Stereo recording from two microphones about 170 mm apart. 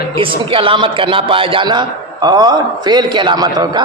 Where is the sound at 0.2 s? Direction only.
30° right (ahead or behind).